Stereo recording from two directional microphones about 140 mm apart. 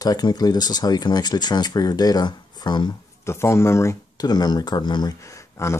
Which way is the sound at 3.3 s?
20° left (ahead or behind).